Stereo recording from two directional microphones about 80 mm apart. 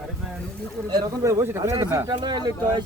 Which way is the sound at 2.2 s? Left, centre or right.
Right.